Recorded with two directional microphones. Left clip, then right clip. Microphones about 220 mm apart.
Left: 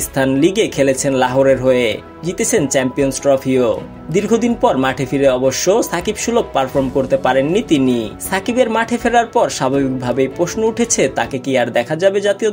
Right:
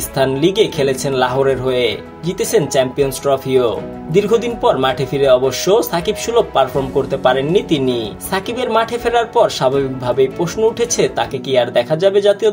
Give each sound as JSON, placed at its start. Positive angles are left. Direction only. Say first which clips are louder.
{"t": 0.2, "sound": "speech", "louder": "right 1 dB", "side_deg": 30}